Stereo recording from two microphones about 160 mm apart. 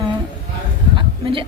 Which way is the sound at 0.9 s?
35° right (ahead or behind).